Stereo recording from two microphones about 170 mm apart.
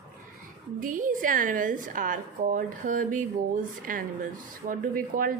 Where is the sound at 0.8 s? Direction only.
50° right (ahead or behind).